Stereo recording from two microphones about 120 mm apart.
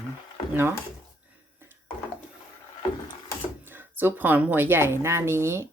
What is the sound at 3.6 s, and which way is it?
A woman's voice, 15° right (ahead or behind).